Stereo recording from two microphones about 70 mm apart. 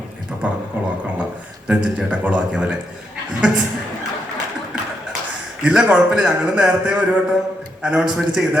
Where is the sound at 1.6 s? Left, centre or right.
Centre.